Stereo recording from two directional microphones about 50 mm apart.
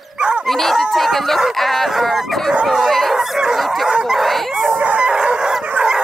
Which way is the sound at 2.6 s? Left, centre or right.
Centre.